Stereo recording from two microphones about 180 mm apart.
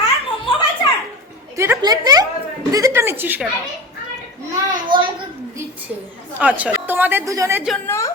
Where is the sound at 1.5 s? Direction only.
15° right (ahead or behind).